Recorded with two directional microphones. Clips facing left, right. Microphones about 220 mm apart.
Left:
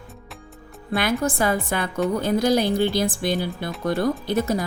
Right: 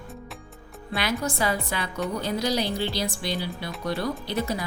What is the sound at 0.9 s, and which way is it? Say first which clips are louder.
Speech: left 5 dB; 50° left (ahead or behind).